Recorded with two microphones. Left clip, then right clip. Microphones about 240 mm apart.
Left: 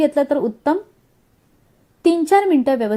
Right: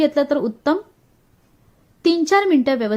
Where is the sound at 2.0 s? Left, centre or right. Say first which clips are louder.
Left 1 dB; centre.